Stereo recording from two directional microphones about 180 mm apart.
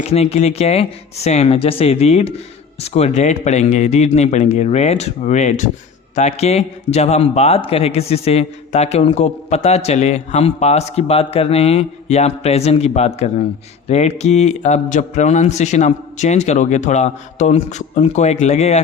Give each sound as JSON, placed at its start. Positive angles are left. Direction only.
{"t": 0.0, "sound": "a man's voice", "side_deg": 35}